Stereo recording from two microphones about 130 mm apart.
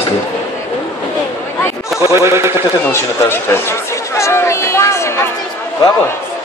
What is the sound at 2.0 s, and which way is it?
Speech, 20° right (ahead or behind).